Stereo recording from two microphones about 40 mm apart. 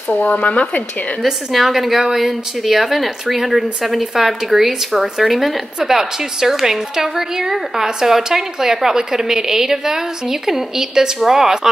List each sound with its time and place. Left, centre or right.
0.1 s speech: left
1.2 s speech: centre
5.9 s a woman's voice: centre